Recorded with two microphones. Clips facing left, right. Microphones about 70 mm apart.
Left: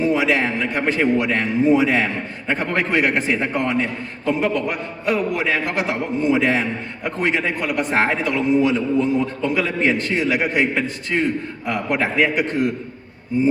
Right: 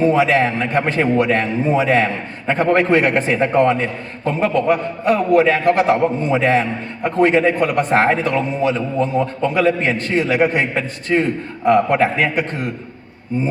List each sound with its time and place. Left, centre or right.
0.0 s a man's voice: right